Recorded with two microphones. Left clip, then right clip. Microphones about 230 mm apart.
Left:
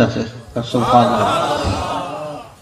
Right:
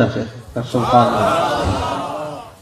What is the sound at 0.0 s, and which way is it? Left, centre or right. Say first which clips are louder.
Speech: left 1 dB; left.